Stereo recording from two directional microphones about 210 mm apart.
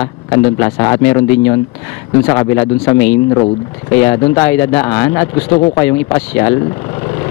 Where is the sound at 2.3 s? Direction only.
20° left (ahead or behind).